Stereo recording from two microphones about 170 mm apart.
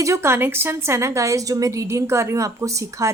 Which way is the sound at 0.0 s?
15° right (ahead or behind).